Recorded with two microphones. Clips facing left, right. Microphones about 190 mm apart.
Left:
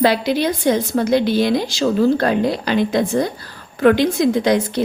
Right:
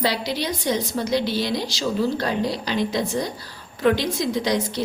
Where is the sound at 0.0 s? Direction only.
55° left (ahead or behind).